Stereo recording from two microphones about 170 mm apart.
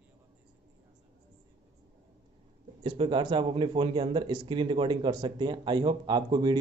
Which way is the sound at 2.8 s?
30° right (ahead or behind).